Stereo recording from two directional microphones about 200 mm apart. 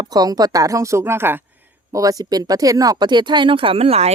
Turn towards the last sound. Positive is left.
turn(degrees=-30)  # may be behind; listen again after turning